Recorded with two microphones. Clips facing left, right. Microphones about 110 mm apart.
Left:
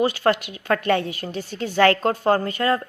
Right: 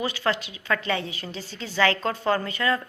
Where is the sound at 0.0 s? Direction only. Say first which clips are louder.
Left 7 dB; 50° left (ahead or behind).